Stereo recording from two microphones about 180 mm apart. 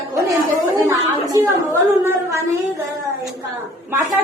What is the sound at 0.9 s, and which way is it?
Speech, 15° right (ahead or behind).